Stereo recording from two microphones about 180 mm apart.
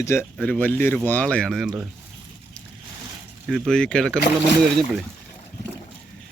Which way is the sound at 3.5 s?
Centre (ahead or behind).